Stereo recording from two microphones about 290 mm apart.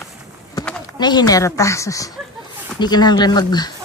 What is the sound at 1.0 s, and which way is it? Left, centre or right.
Speech, centre.